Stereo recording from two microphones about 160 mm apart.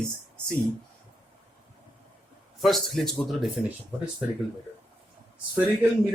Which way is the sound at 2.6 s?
Centre (ahead or behind).